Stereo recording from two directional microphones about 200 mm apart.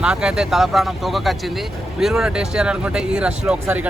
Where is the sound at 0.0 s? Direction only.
5° right (ahead or behind).